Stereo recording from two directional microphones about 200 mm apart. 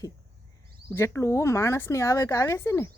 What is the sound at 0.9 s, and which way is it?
Speech, 15° left (ahead or behind).